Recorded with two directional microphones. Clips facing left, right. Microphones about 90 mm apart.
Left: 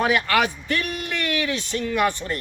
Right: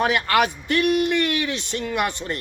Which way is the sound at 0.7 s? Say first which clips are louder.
Right 7 dB; 20° right (ahead or behind).